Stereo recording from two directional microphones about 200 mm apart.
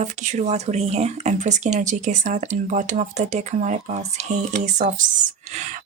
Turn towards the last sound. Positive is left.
turn(degrees=-35)  # may be behind; listen again after turning